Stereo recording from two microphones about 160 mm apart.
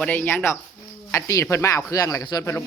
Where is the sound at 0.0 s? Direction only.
10° left (ahead or behind).